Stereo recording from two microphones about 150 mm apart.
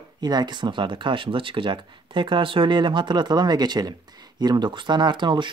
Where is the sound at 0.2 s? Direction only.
30° right (ahead or behind).